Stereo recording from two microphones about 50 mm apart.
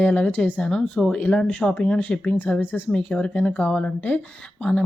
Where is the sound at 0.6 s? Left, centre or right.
Centre.